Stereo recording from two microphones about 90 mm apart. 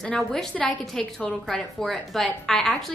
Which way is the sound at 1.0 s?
15° left (ahead or behind).